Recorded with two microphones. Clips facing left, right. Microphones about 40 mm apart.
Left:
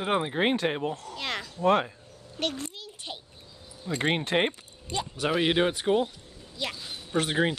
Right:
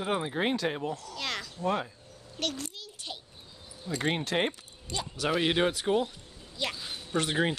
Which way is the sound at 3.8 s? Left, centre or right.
Left.